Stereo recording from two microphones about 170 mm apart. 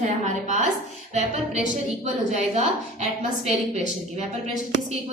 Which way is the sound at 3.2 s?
40° right (ahead or behind).